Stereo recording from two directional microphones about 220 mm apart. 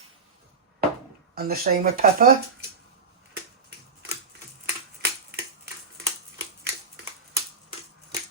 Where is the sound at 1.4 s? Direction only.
45° right (ahead or behind).